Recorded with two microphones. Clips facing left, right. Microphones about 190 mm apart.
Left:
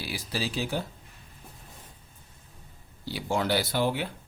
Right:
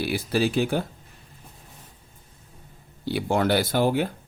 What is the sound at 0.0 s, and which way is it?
Speech, 55° right (ahead or behind).